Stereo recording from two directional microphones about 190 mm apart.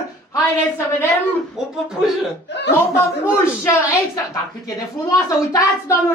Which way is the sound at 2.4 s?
65° left (ahead or behind).